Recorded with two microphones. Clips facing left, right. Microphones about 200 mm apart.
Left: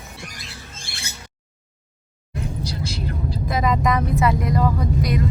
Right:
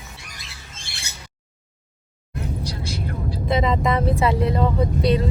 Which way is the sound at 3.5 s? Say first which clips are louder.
Right 1 dB; 25° right (ahead or behind).